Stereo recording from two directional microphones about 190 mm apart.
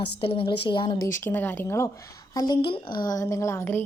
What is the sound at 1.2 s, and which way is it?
A woman's voice, 10° left (ahead or behind).